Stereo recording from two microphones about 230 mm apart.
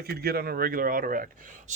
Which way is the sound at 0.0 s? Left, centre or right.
Right.